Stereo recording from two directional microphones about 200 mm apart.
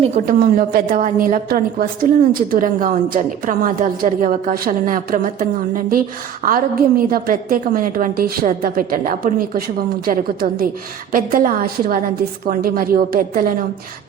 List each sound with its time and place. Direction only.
0.3 s a woman's voice: 45° right (ahead or behind)